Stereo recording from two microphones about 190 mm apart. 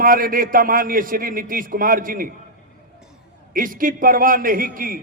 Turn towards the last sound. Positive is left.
turn(degrees=-50)  # may be behind; listen again after turning